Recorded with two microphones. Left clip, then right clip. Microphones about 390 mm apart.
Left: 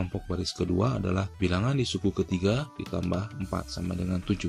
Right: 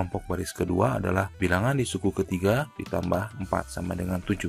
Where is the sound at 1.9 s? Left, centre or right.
Right.